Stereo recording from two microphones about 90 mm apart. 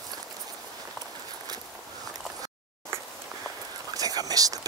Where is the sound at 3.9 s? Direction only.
45° right (ahead or behind).